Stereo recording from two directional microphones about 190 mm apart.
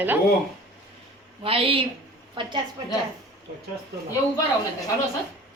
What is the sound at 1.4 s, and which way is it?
A woman's voice, 30° right (ahead or behind).